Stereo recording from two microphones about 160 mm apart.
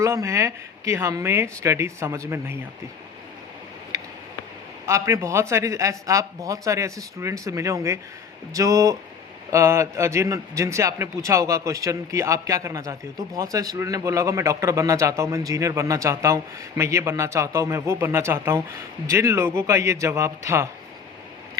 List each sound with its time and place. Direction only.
0.0 s speech: 20° right (ahead or behind)
4.9 s a man's voice: 20° right (ahead or behind)